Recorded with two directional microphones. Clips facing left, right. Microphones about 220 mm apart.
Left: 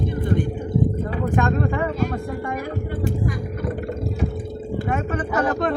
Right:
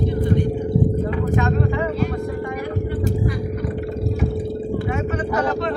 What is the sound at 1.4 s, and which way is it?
Speech, 50° left (ahead or behind).